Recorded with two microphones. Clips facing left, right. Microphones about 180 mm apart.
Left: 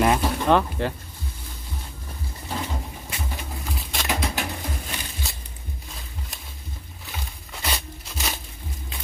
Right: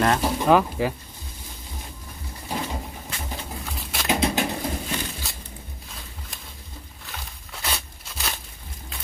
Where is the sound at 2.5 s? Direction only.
15° right (ahead or behind).